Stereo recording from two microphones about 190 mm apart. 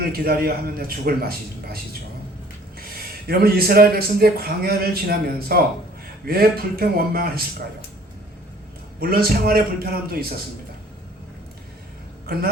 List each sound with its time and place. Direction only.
0.0 s speech: 55° right (ahead or behind)
9.0 s speech: 50° right (ahead or behind)
12.2 s speech: 50° right (ahead or behind)